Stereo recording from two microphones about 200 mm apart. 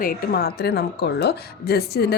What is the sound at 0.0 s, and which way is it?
A woman's voice, 45° left (ahead or behind).